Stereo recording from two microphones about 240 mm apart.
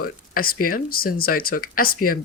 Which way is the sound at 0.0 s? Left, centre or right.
Left.